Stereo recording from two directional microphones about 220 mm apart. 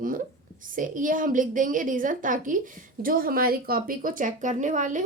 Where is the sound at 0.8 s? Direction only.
35° right (ahead or behind).